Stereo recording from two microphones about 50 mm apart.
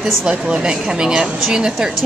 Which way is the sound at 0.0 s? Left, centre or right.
Centre.